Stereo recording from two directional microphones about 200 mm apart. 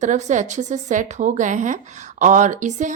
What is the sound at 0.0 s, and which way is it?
Speech, 35° right (ahead or behind).